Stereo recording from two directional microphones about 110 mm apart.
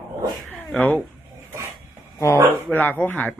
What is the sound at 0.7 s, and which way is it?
Speech, 10° left (ahead or behind).